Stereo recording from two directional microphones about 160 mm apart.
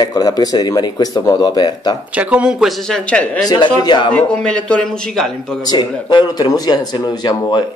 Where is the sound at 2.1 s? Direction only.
10° right (ahead or behind); by 3.5 s 5° left (ahead or behind).